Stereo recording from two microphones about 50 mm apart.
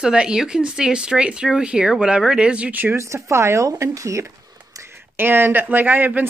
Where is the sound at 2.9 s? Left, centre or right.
Right.